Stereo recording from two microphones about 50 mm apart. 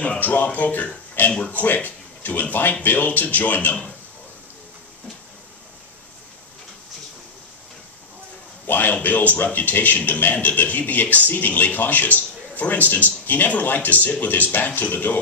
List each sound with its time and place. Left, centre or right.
0.2 s a man's voice: left
1.3 s speech: left
1.6 s a man's voice: left
8.6 s a man's voice: left